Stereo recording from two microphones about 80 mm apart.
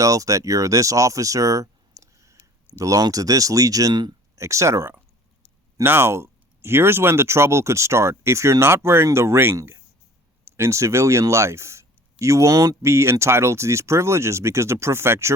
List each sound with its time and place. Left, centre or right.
0.0 s speech: right
4.4 s speech: right